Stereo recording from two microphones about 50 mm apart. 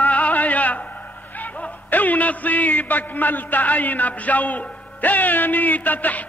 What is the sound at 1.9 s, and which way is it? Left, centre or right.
A man's voice, left.